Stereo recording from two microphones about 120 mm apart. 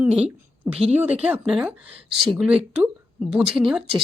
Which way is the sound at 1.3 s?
5° right (ahead or behind).